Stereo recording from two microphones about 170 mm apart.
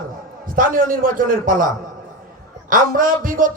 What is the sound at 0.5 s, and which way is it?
A man's voice, 55° right (ahead or behind).